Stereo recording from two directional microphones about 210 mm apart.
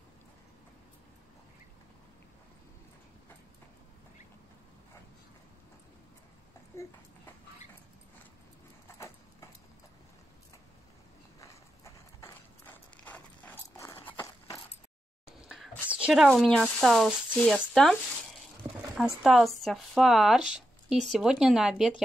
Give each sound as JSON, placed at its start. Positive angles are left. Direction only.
{"t": 6.7, "sound": "a sound", "side_deg": 15}
{"t": 8.8, "sound": "horse", "side_deg": 15}
{"t": 11.4, "sound": "clip-clop", "side_deg": 15}
{"t": 14.1, "sound": "horse", "side_deg": 15}
{"t": 15.4, "sound": "speech", "side_deg": -5}